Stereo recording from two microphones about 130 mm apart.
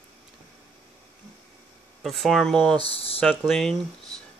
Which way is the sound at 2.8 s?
45° left (ahead or behind).